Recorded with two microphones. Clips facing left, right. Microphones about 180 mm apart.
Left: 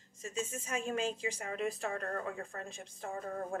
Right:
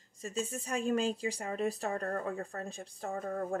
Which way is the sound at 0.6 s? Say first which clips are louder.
Right 5 dB; 35° right (ahead or behind).